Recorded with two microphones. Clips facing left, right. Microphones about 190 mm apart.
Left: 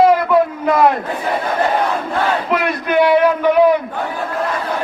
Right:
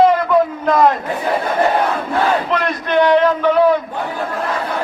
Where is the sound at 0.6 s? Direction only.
10° left (ahead or behind).